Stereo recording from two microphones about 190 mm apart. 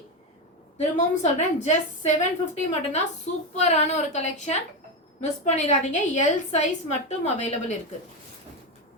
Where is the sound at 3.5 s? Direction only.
35° left (ahead or behind).